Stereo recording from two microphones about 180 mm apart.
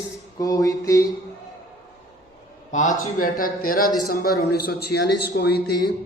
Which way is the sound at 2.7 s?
40° left (ahead or behind).